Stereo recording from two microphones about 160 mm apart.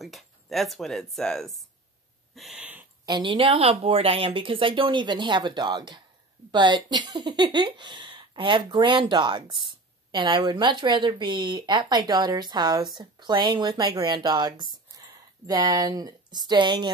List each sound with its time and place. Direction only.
0.0 s speech: centre (ahead or behind)
2.3 s a sound: centre (ahead or behind)
3.1 s a woman's voice: 30° right (ahead or behind)